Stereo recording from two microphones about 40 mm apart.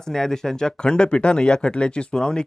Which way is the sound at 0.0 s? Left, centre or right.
Centre.